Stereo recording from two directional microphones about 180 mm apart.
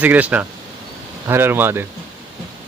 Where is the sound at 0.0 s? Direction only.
10° right (ahead or behind).